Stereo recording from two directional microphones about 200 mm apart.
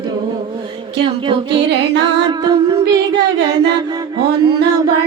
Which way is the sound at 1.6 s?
60° right (ahead or behind).